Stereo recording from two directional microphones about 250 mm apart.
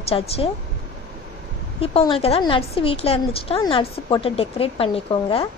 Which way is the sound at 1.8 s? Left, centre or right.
Left.